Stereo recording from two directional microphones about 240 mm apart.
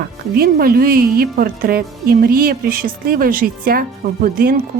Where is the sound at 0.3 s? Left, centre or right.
Right.